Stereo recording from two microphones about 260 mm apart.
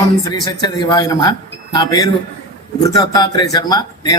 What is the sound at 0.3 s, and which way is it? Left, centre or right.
A man's voice, centre.